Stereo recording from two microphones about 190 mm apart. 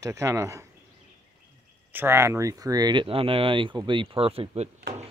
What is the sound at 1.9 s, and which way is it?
Speech, 10° right (ahead or behind).